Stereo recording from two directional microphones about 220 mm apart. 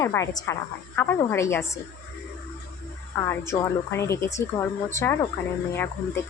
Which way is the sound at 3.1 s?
10° left (ahead or behind).